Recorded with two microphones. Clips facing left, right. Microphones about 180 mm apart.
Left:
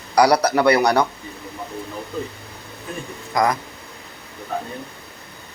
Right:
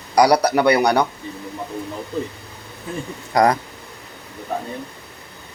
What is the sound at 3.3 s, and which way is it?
Speech, 35° right (ahead or behind).